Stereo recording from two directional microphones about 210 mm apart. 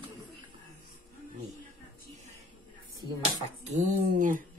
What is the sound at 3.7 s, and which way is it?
Speech, 40° right (ahead or behind).